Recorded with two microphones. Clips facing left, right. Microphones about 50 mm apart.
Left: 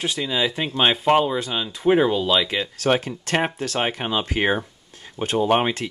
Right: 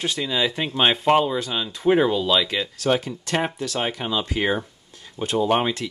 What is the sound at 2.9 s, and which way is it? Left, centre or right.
Speech, left.